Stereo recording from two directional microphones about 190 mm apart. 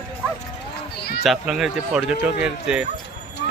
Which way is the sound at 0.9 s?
55° left (ahead or behind).